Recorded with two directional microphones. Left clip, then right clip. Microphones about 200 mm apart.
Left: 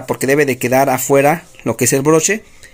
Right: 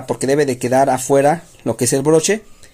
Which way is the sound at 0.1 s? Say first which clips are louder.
Left 2 dB; 5° left (ahead or behind).